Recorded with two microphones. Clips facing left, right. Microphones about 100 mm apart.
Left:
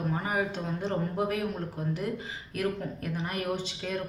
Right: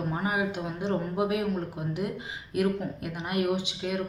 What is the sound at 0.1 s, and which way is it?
Speech, 15° right (ahead or behind).